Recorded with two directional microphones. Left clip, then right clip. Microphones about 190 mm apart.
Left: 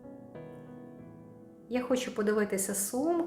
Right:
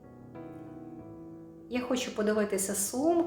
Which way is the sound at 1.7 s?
25° left (ahead or behind).